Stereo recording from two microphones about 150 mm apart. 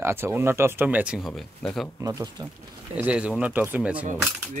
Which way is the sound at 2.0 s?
20° right (ahead or behind).